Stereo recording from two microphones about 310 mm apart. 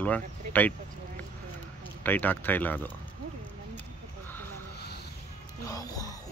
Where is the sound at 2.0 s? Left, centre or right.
Centre.